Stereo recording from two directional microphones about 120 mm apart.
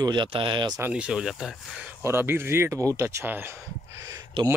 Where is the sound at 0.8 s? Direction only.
10° right (ahead or behind).